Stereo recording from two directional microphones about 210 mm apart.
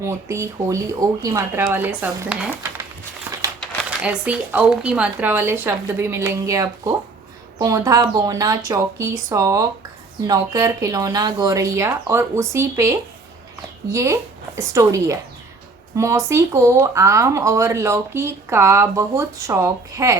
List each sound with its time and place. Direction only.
0.0 s speech: 15° right (ahead or behind)